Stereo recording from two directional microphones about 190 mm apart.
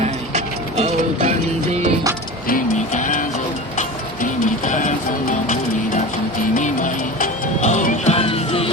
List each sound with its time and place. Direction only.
0.0 s music: 35° right (ahead or behind)
2.5 s music: 45° left (ahead or behind)
3.8 s a sound: 40° left (ahead or behind)
6.5 s music: 40° left (ahead or behind)